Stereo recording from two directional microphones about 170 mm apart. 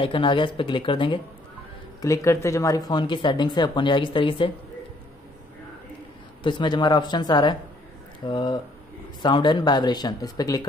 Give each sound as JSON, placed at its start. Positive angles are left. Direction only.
{"t": 0.0, "sound": "speech", "side_deg": 30}
{"t": 2.0, "sound": "speech", "side_deg": 20}
{"t": 6.4, "sound": "speech", "side_deg": 25}